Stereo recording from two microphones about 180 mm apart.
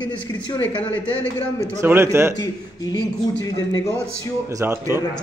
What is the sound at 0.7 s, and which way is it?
Speech, 10° left (ahead or behind).